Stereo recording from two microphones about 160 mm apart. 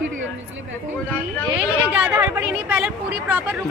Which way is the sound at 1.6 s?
10° right (ahead or behind).